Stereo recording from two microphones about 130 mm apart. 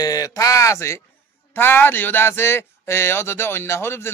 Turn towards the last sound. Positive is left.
turn(degrees=20)  # may be behind; listen again after turning